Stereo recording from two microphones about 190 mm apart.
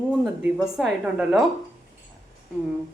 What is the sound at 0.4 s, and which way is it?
A woman's voice, centre (ahead or behind).